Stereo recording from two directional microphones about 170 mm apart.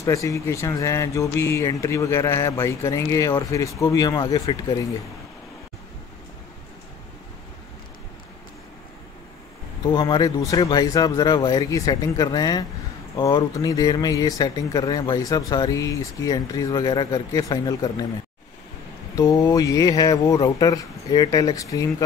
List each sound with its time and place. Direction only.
0.0 s speech: 20° left (ahead or behind)
9.8 s speech: 25° left (ahead or behind)
19.1 s speech: 20° left (ahead or behind)